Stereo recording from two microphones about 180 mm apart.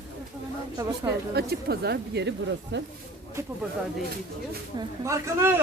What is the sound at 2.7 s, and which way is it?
Speech, 80° right.